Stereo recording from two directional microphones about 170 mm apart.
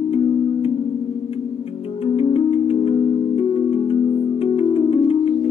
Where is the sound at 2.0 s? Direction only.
35° left (ahead or behind).